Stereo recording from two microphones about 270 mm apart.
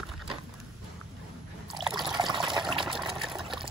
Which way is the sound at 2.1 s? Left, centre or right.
Centre.